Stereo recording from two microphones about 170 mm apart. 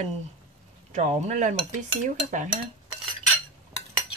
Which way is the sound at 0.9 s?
45° right (ahead or behind).